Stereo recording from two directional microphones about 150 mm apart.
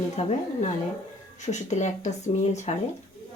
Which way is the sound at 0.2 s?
50° left (ahead or behind).